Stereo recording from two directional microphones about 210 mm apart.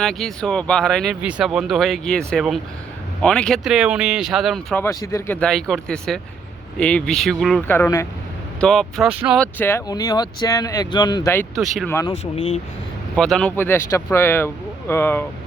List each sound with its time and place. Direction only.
0.0 s speech: centre (ahead or behind)
8.6 s speech: centre (ahead or behind)
9.4 s speech: 10° left (ahead or behind)
11.5 s speech: centre (ahead or behind)
11.9 s speech: 15° left (ahead or behind)
12.1 s speech: 30° left (ahead or behind)
13.1 s speech: centre (ahead or behind)